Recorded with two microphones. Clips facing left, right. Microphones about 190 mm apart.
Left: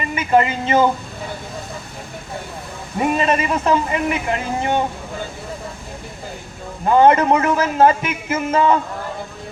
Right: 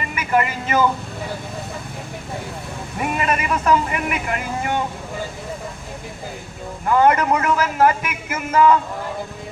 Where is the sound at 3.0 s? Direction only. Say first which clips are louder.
Left 4 dB; 25° left (ahead or behind).